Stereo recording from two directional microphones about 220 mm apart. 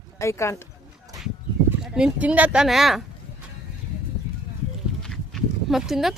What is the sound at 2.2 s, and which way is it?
Speech, 5° right (ahead or behind).